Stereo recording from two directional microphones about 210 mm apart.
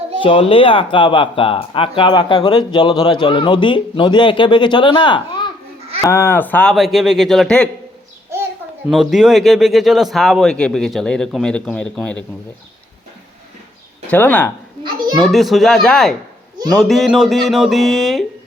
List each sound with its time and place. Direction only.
0.2 s speech: 25° left (ahead or behind); by 7.7 s 5° left (ahead or behind)
8.9 s speech: centre (ahead or behind)
14.1 s speech: 10° left (ahead or behind)